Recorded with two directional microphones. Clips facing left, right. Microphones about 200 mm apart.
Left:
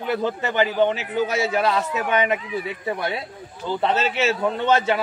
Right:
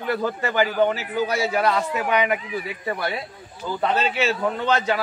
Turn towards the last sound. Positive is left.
turn(degrees=25)  # may be behind; listen again after turning